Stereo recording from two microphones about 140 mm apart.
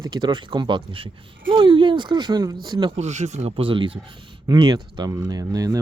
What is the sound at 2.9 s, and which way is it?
Speech, 55° right (ahead or behind).